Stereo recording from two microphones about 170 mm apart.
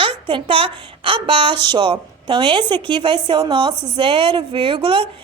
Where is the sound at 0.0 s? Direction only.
30° right (ahead or behind).